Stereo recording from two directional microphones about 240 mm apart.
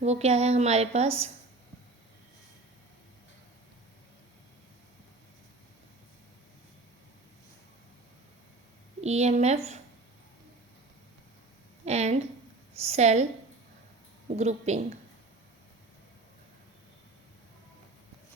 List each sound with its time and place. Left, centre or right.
0.0 s a woman's voice: right
9.0 s a woman's voice: right
11.9 s a woman's voice: right
14.3 s a woman's voice: right